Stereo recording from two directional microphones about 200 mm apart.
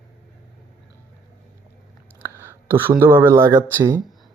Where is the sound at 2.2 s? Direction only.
10° right (ahead or behind).